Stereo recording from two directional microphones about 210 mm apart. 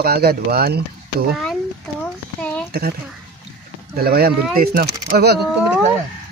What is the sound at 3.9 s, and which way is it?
Speech, 45° right (ahead or behind).